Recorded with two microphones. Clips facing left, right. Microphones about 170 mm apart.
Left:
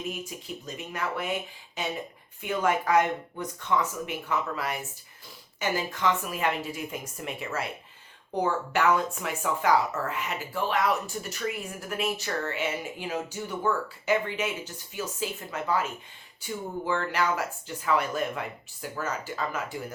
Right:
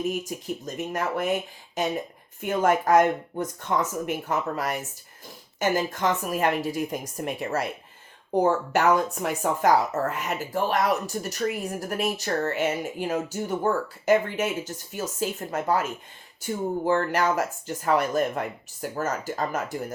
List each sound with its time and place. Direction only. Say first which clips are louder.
0.0 s a woman's voice: right 7 dB; 45° right (ahead or behind)